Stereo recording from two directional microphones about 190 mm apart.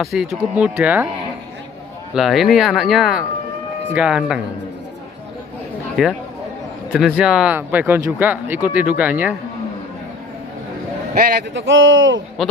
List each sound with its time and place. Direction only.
0.0 s speech: centre (ahead or behind)
2.1 s speech: centre (ahead or behind)
6.0 s speech: centre (ahead or behind)
11.6 s speech: 90° right
12.4 s speech: centre (ahead or behind)